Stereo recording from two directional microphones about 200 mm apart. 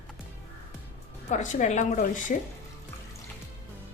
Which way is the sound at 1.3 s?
40° left (ahead or behind).